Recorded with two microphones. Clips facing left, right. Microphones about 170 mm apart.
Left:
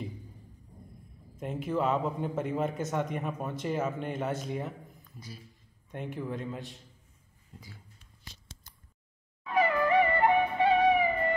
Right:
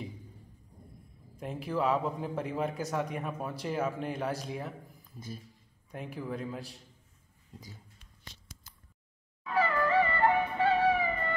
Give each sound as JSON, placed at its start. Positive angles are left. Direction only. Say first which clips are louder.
{"t": 1.4, "sound": "speech", "louder": "left 1 dB", "side_deg": 0}
{"t": 5.9, "sound": "speech", "louder": "left 2 dB", "side_deg": 0}
{"t": 9.5, "sound": "music", "louder": "left 2 dB", "side_deg": 15}